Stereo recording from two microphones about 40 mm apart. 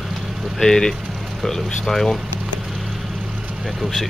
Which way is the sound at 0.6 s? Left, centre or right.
Centre.